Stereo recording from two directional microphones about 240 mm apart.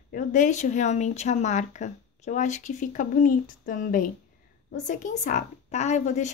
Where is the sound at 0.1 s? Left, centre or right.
Left.